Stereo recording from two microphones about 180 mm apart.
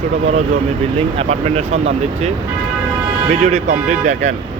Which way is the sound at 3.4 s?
40° right (ahead or behind).